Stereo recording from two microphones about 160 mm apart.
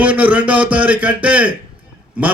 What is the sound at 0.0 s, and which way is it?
A man's voice, 10° right (ahead or behind).